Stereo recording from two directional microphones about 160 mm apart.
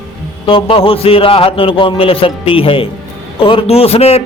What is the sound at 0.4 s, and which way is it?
A man's voice, 35° left (ahead or behind).